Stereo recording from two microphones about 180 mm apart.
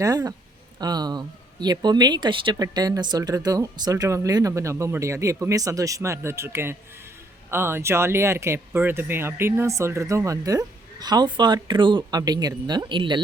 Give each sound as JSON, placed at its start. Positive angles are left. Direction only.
{"t": 0.0, "sound": "speech", "side_deg": -20}